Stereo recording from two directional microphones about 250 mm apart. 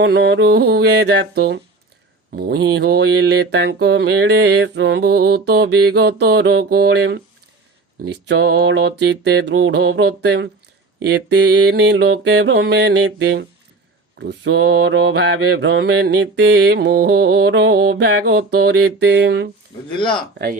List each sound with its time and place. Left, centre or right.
0.0 s mantra: right